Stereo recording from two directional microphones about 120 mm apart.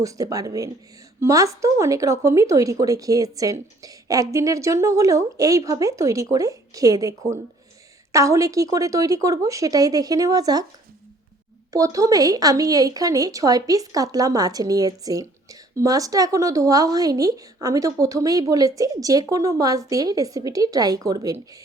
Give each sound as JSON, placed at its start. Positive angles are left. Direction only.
{"t": 0.0, "sound": "speech", "side_deg": -30}
{"t": 11.7, "sound": "speech", "side_deg": -30}